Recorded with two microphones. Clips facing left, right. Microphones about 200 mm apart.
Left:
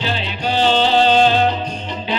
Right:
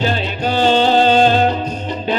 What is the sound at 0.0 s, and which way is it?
Music, 45° right (ahead or behind).